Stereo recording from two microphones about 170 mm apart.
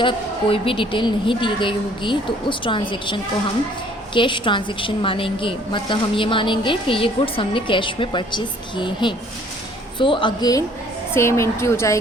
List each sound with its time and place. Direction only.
0.0 s a woman's voice: 30° left (ahead or behind)